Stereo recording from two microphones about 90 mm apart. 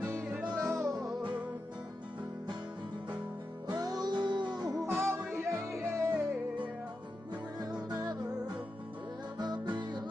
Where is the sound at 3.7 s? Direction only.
45° right (ahead or behind).